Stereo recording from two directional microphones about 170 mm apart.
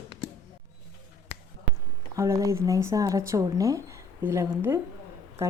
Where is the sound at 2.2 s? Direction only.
15° right (ahead or behind).